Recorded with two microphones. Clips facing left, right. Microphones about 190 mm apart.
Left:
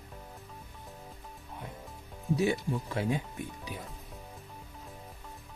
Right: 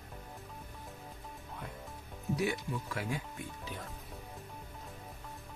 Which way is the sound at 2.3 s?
25° left (ahead or behind).